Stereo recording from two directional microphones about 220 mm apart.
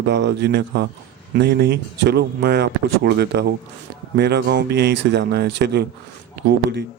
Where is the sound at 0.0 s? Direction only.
50° right (ahead or behind).